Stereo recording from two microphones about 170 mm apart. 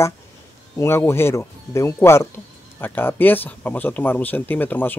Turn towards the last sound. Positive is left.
turn(degrees=10)  # may be behind; listen again after turning